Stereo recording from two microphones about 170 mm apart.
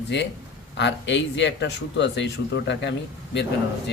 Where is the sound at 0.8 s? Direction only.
90° left.